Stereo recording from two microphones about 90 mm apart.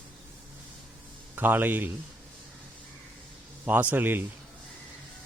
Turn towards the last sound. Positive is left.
turn(degrees=-20)  # may be behind; listen again after turning